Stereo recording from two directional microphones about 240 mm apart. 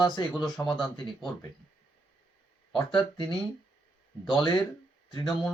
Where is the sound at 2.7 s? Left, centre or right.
Left.